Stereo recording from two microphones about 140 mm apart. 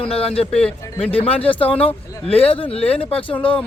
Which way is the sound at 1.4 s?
40° left (ahead or behind).